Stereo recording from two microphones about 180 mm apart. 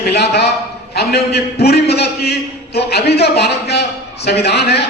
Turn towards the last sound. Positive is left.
turn(degrees=65)  # may be behind; listen again after turning